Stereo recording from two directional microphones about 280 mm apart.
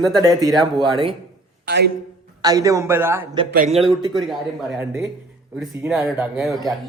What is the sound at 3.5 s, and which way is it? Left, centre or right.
Speech, right.